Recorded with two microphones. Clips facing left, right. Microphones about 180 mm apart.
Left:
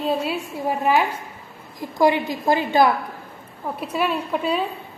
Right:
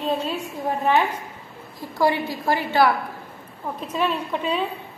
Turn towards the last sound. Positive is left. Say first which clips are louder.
# left 2 dB
turn(degrees=10)  # may be behind; listen again after turning